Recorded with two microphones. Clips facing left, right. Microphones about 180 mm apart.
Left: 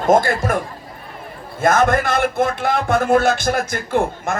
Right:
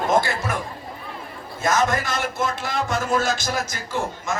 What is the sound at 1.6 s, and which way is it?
Speech, 55° left (ahead or behind).